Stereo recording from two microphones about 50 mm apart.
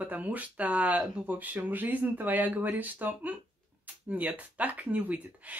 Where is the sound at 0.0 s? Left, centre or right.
Right.